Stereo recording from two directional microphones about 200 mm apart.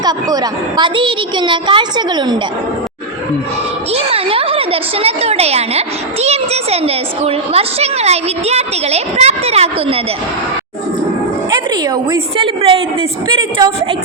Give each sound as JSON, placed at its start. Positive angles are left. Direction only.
{"t": 0.0, "sound": "a woman's voice", "side_deg": -20}
{"t": 3.9, "sound": "a woman's voice", "side_deg": -30}
{"t": 11.5, "sound": "a woman's voice", "side_deg": -20}